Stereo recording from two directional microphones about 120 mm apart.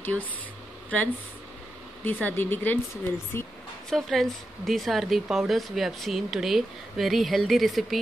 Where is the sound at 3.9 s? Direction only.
Centre (ahead or behind).